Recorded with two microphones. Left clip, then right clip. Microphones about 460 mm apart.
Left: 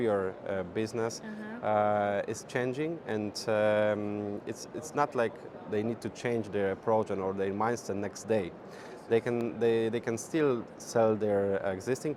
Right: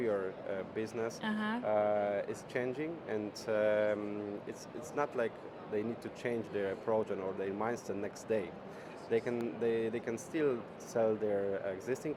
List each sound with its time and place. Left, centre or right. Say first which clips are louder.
0.0 s speech: left 5 dB; left